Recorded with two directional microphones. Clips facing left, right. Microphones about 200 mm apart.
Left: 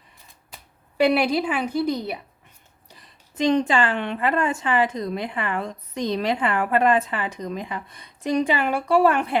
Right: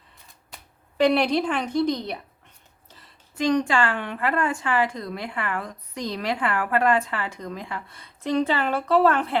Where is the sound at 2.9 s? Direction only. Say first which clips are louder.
Left 2 dB; 20° left (ahead or behind).